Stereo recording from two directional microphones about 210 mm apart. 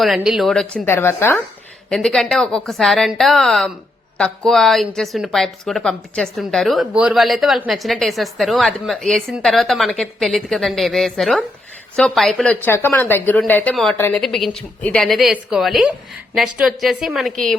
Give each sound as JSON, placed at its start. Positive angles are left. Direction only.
{"t": 0.0, "sound": "a woman's voice", "side_deg": 0}